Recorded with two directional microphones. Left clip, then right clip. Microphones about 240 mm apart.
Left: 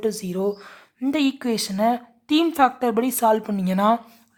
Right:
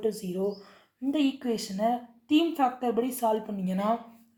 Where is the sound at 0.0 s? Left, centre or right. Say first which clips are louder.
Left 5 dB; left.